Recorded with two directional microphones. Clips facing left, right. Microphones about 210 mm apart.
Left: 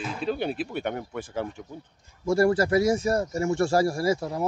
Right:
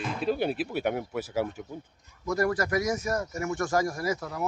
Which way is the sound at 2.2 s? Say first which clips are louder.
Left 6 dB; 30° left (ahead or behind).